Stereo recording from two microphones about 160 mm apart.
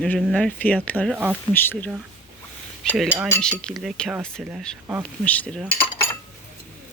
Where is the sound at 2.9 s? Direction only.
5° right (ahead or behind).